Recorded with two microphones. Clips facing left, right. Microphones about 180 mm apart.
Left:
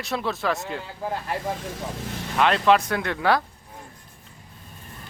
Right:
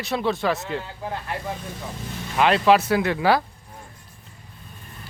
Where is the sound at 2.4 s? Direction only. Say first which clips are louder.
Right 2 dB; 5° right (ahead or behind).